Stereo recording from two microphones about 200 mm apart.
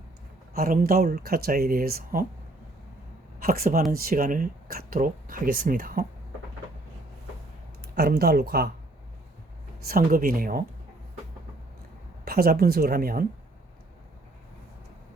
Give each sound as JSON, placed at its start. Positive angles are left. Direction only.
{"t": 0.5, "sound": "speech", "side_deg": -45}
{"t": 3.4, "sound": "speech", "side_deg": -45}
{"t": 7.8, "sound": "speech", "side_deg": -50}
{"t": 9.9, "sound": "speech", "side_deg": -45}
{"t": 12.2, "sound": "speech", "side_deg": -50}